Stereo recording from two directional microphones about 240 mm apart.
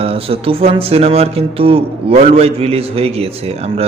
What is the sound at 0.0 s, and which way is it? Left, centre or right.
Speech, right.